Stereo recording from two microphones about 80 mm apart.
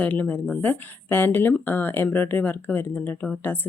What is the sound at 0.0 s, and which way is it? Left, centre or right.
A woman's voice, centre.